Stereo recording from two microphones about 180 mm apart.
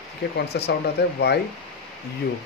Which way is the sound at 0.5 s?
65° left (ahead or behind).